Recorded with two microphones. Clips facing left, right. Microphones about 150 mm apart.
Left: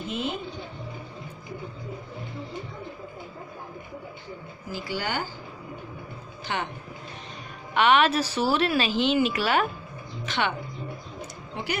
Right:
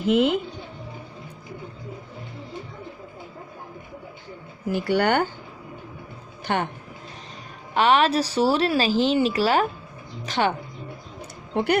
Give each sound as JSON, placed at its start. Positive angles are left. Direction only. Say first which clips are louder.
{"t": 0.0, "sound": "speech", "louder": "right 11 dB", "side_deg": -80}
{"t": 4.7, "sound": "speech", "louder": "right 10 dB", "side_deg": -65}
{"t": 6.4, "sound": "speech", "louder": "right 6 dB", "side_deg": -55}
{"t": 7.7, "sound": "a woman's voice", "louder": "right 2 dB", "side_deg": -35}
{"t": 11.5, "sound": "speech", "louder": "right 10 dB", "side_deg": -60}